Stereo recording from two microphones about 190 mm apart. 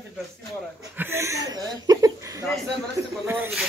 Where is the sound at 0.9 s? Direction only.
15° right (ahead or behind).